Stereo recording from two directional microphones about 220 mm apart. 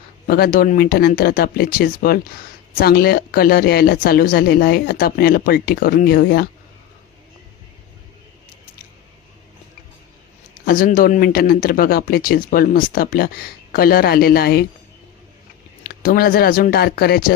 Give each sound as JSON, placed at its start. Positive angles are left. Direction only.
{"t": 0.3, "sound": "a woman's voice", "side_deg": 45}
{"t": 10.7, "sound": "speech", "side_deg": 40}
{"t": 15.8, "sound": "a woman's voice", "side_deg": 40}